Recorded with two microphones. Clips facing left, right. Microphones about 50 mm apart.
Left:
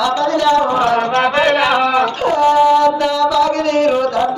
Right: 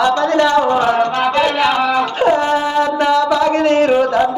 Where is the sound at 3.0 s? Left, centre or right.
Right.